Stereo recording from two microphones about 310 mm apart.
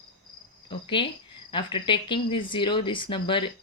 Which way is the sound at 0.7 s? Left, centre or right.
Centre.